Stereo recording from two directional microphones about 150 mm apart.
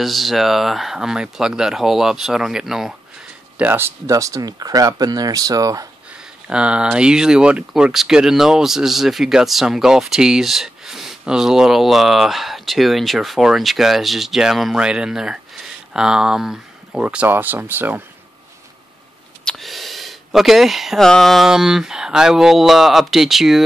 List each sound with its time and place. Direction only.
0.0 s speech: centre (ahead or behind)
3.5 s speech: 15° right (ahead or behind)
6.4 s speech: 5° right (ahead or behind)
19.4 s speech: centre (ahead or behind)